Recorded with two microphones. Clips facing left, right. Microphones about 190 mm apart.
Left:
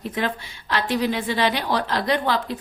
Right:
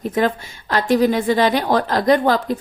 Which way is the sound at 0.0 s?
45° right (ahead or behind).